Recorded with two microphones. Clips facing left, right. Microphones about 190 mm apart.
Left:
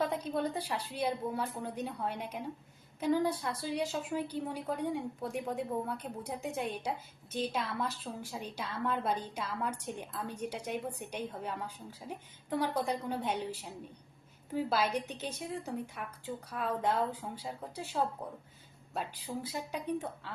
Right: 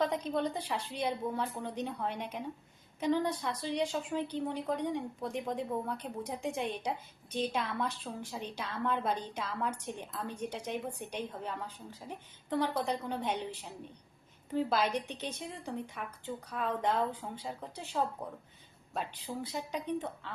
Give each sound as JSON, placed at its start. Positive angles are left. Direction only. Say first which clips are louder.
{"t": 0.0, "sound": "a woman's voice", "louder": "right 1 dB", "side_deg": 10}